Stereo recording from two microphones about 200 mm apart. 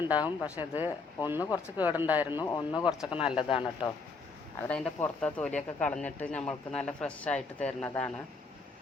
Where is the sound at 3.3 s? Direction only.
25° left (ahead or behind).